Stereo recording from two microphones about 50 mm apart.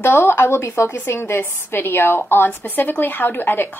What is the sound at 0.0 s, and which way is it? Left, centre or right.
A woman's voice, left.